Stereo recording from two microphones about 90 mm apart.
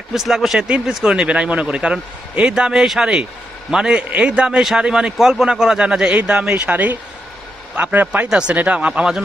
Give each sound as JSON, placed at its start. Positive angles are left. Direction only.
{"t": 0.1, "sound": "a man's voice", "side_deg": -5}